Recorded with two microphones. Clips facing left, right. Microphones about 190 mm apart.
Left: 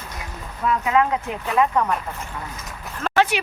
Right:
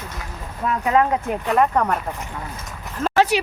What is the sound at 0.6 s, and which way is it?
Speech, 35° right (ahead or behind).